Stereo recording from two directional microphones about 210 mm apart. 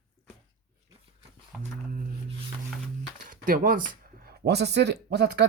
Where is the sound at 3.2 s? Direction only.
40° right (ahead or behind).